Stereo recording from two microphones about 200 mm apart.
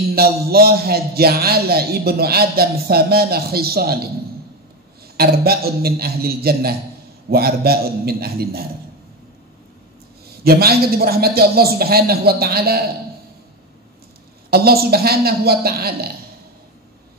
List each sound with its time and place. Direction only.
0.1 s a man's voice: 50° right (ahead or behind)
5.1 s a man's voice: 50° right (ahead or behind)
10.4 s a man's voice: 50° right (ahead or behind)
14.5 s a man's voice: 50° right (ahead or behind)